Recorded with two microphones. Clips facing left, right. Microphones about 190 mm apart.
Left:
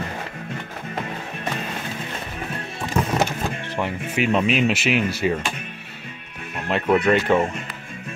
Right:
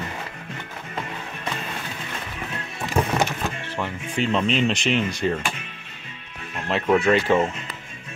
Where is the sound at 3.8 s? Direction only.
10° left (ahead or behind).